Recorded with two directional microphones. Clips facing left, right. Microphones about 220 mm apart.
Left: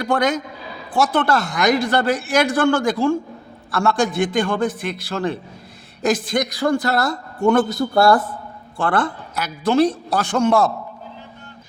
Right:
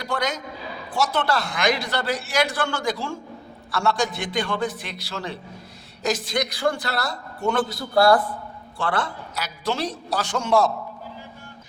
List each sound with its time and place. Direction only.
0.0 s a man's voice: 55° left (ahead or behind)